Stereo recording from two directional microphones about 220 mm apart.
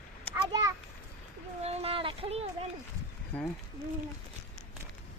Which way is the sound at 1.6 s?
30° right (ahead or behind).